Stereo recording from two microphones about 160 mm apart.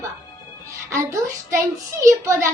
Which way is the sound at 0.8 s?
20° right (ahead or behind).